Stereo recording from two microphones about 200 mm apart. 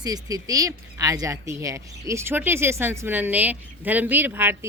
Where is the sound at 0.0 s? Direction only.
20° right (ahead or behind).